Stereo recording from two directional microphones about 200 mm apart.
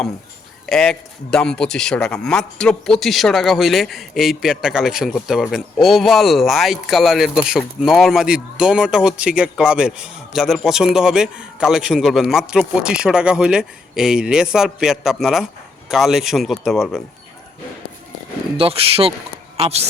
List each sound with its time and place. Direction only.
0.7 s a man's voice: 5° left (ahead or behind)
18.5 s speech: 30° right (ahead or behind)